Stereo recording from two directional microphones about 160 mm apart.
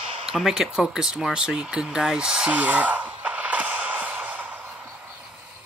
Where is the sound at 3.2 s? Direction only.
10° right (ahead or behind).